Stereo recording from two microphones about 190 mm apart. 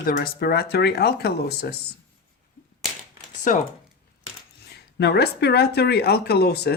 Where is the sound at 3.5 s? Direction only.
45° left (ahead or behind).